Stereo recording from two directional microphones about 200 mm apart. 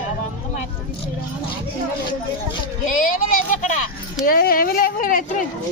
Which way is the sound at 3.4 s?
40° left (ahead or behind).